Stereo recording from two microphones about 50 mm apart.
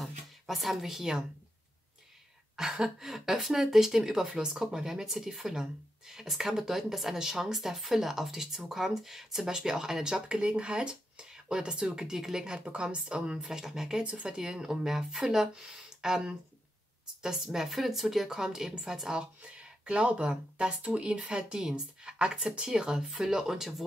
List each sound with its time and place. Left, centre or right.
0.0 s speech: centre
2.5 s a woman's voice: centre
10.2 s a woman's voice: right
14.0 s speech: right
14.3 s a woman's voice: centre